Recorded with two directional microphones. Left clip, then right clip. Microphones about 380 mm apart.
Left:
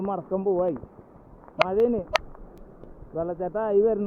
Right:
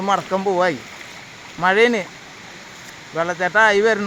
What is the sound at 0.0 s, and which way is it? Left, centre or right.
Speech, centre.